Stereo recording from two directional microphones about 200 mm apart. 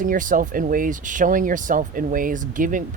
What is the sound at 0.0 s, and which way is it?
Speech, 40° right (ahead or behind).